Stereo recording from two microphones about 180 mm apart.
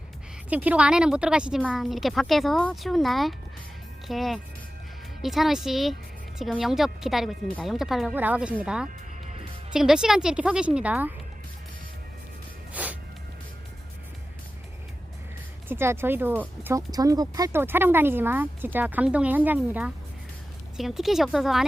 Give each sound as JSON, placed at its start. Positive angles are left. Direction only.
{"t": 0.5, "sound": "a woman's voice", "side_deg": -10}
{"t": 12.7, "sound": "music", "side_deg": -10}
{"t": 15.7, "sound": "a woman's voice", "side_deg": -15}